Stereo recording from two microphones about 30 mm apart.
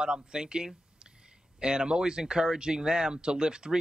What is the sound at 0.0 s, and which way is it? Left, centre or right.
Speech, right.